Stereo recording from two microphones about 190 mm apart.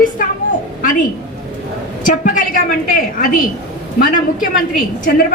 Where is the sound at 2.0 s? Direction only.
45° left (ahead or behind).